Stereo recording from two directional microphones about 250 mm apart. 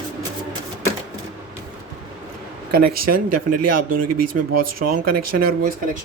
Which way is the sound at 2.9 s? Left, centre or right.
Right.